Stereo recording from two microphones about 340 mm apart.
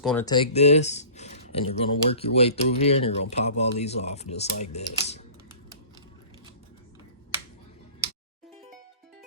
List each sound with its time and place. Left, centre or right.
0.0 s speech: centre